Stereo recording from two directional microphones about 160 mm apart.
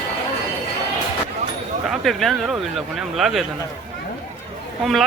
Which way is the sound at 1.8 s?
Centre (ahead or behind).